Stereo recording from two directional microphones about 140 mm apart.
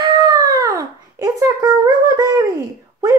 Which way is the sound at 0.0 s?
30° right (ahead or behind).